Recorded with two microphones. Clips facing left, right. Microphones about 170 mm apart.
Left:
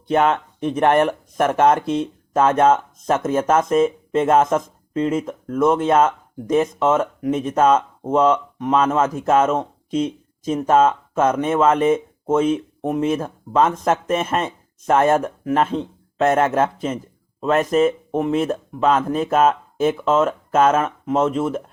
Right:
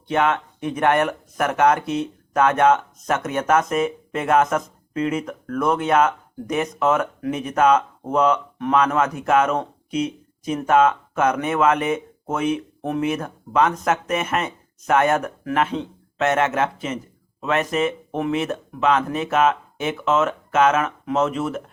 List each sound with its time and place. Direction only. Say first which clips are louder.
0.1 s speech: left 3 dB; 35° left (ahead or behind)
1.4 s speech: left 2 dB; 30° left (ahead or behind)